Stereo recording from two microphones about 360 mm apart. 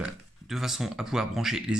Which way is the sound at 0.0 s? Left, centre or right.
Centre.